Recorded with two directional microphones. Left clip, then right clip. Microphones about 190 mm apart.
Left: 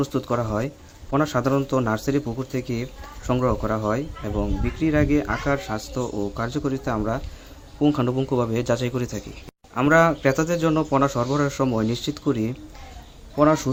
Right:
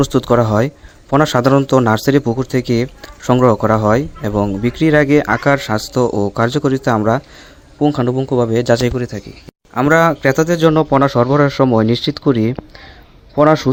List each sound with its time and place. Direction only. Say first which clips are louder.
0.0 s speech: right 11 dB; 45° right (ahead or behind)
7.8 s a man's voice: right 6 dB; 30° right (ahead or behind)